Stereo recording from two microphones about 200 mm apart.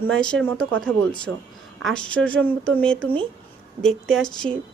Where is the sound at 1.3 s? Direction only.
90° right.